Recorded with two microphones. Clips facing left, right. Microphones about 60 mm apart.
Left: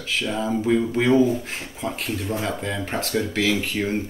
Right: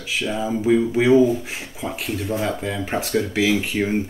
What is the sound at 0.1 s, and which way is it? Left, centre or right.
Speech, centre.